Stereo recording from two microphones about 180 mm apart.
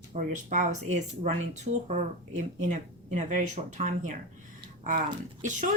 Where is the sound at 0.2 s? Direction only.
45° right (ahead or behind).